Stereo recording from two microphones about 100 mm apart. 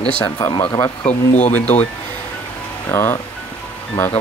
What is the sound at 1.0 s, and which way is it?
Speech, 15° left (ahead or behind).